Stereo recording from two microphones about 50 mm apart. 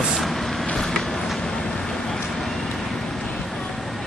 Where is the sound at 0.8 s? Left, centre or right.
Centre.